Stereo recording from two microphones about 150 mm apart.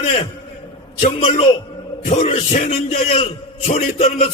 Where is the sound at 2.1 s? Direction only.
55° left (ahead or behind).